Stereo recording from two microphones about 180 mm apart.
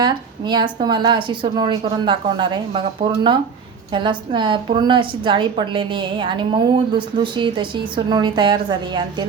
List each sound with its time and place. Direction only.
0.0 s a woman's voice: 25° right (ahead or behind)